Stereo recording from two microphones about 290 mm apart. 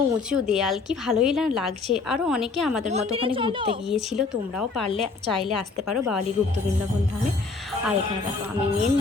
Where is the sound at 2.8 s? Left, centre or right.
Right.